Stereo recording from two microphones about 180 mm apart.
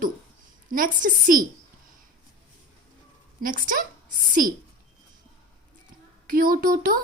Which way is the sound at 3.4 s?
50° right (ahead or behind).